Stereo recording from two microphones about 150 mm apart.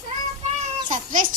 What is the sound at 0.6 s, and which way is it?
Children playing, 60° right (ahead or behind).